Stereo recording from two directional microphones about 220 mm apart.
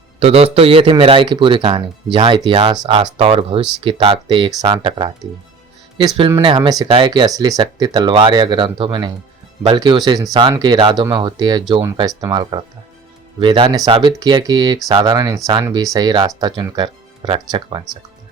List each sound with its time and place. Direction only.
0.2 s speech: 30° right (ahead or behind)